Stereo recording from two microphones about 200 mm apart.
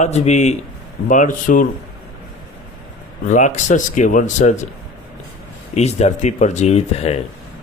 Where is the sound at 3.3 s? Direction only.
35° left (ahead or behind).